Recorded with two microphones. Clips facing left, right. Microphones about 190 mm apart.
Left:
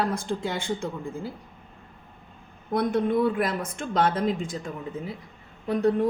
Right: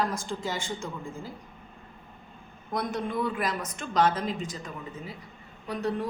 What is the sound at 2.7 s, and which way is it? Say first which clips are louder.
A woman's voice: left 7 dB; 55° left (ahead or behind).